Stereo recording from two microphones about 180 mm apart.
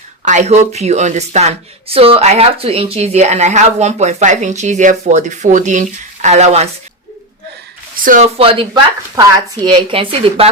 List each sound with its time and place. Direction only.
0.3 s a woman's voice: 40° right (ahead or behind)
7.9 s speech: 50° right (ahead or behind)
8.4 s a woman's voice: 30° right (ahead or behind)